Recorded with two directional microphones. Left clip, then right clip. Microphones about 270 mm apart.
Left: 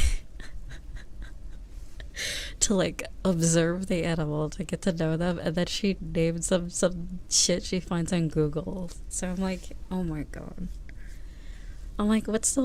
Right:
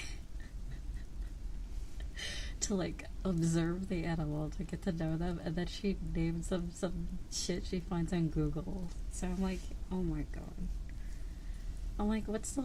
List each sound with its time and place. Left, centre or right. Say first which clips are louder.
2.1 s a woman's voice: left 11 dB; left
11.9 s a woman's voice: left 10 dB; left